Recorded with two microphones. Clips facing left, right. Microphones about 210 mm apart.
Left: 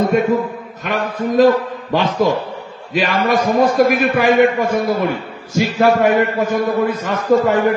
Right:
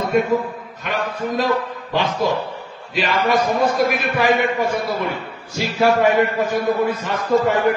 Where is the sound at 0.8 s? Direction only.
45° left (ahead or behind).